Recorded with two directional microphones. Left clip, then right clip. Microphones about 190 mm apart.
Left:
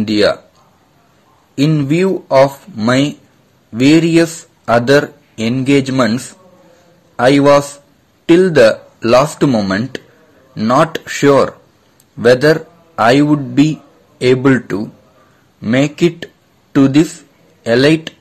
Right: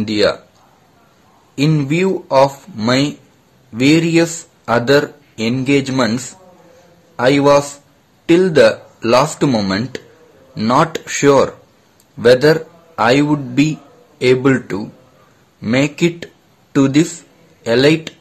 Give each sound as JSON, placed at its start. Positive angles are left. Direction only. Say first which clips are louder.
{"t": 0.0, "sound": "speech", "louder": "left 2 dB", "side_deg": 15}
{"t": 1.5, "sound": "speech", "louder": "left 2 dB", "side_deg": 10}
{"t": 9.5, "sound": "a man's voice", "louder": "left 2 dB", "side_deg": 5}